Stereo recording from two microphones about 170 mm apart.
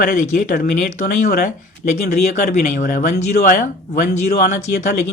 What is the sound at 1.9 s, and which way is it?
Speech, 45° left (ahead or behind).